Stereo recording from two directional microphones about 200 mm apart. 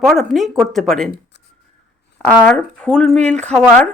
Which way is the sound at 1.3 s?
60° left (ahead or behind).